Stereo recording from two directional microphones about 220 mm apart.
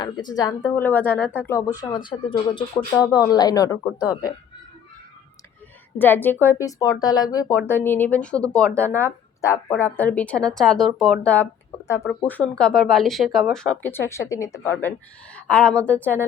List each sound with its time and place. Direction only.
0.0 s speech: 20° left (ahead or behind)
6.0 s speech: 10° left (ahead or behind)